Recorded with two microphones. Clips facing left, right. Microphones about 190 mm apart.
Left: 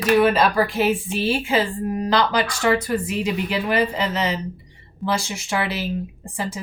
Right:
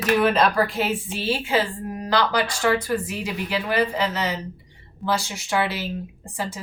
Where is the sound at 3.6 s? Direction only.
15° left (ahead or behind).